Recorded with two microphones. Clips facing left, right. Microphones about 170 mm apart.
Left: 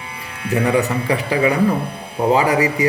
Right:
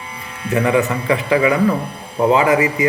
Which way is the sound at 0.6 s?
35° left (ahead or behind).